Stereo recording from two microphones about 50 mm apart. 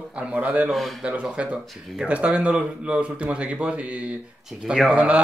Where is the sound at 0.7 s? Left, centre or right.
Centre.